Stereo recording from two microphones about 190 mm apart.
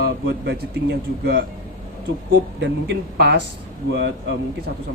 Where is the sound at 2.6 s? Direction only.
60° right (ahead or behind).